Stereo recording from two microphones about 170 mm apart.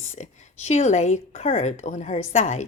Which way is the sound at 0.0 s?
40° left (ahead or behind).